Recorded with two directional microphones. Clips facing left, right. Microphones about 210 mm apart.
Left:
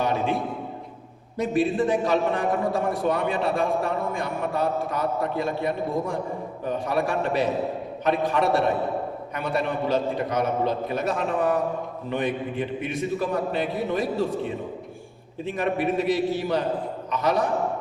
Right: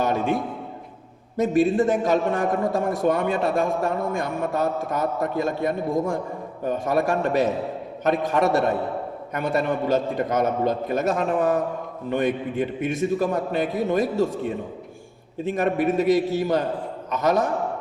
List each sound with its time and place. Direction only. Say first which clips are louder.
0.0 s a man's voice: right 2 dB; 45° right (ahead or behind)
1.4 s a man's voice: right 3 dB; 45° right (ahead or behind)
15.4 s a man's voice: right 3 dB; 45° right (ahead or behind)